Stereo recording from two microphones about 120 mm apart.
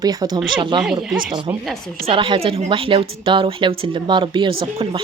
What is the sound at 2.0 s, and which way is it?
A woman's voice, 45° right (ahead or behind).